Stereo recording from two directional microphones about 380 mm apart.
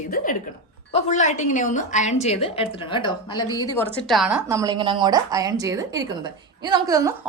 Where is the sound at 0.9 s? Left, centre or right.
Centre.